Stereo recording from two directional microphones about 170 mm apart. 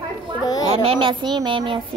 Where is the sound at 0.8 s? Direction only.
30° right (ahead or behind).